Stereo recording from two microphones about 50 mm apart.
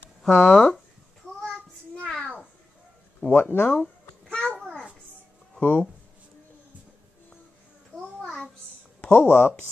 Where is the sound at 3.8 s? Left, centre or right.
Centre.